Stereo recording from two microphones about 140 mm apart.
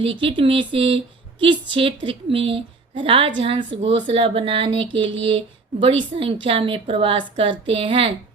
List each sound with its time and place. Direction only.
0.0 s speech: 40° right (ahead or behind)